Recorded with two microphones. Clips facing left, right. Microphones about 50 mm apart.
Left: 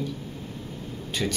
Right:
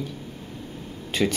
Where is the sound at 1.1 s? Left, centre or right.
Right.